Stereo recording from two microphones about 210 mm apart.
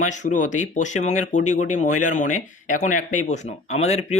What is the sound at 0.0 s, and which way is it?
Speech, 35° left (ahead or behind).